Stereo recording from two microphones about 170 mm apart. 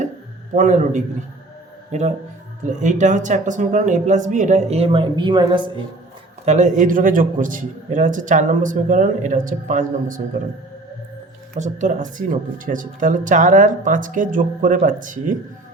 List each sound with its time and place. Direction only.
0.5 s a man's voice: 45° right (ahead or behind); by 5.7 s 25° right (ahead or behind)
6.4 s a man's voice: 40° right (ahead or behind)
11.5 s a man's voice: 45° right (ahead or behind)